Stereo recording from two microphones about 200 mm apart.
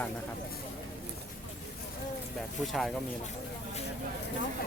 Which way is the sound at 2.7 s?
Centre (ahead or behind).